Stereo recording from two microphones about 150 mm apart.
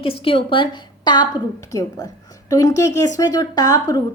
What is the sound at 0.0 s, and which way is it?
A woman's voice, 40° left (ahead or behind).